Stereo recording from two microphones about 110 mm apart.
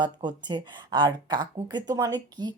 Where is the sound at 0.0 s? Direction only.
40° right (ahead or behind).